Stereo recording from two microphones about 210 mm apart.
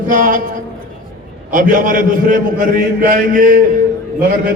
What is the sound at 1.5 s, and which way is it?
A man's voice, 40° right (ahead or behind).